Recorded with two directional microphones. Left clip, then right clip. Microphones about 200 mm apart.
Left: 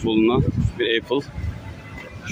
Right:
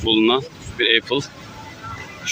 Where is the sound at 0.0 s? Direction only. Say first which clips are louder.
Right 2 dB; 5° left (ahead or behind).